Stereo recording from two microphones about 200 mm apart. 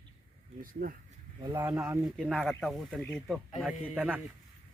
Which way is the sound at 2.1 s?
Centre (ahead or behind).